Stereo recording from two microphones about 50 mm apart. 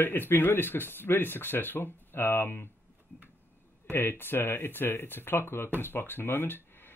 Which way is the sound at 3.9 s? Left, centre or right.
Left.